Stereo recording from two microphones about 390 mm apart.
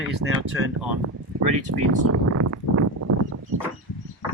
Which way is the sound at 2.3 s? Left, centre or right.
Right.